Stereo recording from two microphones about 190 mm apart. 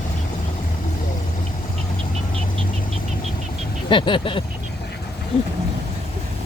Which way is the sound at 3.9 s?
25° left (ahead or behind).